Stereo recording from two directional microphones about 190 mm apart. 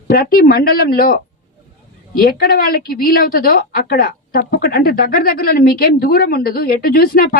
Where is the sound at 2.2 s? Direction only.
50° left (ahead or behind).